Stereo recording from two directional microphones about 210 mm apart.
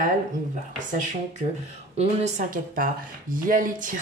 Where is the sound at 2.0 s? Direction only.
40° right (ahead or behind).